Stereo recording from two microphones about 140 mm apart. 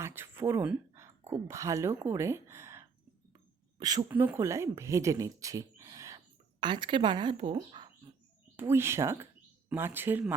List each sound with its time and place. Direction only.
0.0 s speech: 15° right (ahead or behind)
4.1 s speech: 15° right (ahead or behind); by 7.9 s 35° right (ahead or behind)
8.5 s speech: 15° right (ahead or behind)